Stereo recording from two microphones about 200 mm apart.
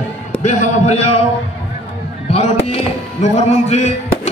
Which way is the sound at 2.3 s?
30° left (ahead or behind).